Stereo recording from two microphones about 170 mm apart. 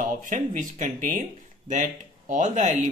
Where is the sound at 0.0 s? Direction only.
50° right (ahead or behind).